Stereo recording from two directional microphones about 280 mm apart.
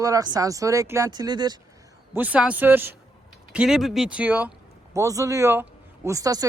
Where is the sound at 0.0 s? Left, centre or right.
Centre.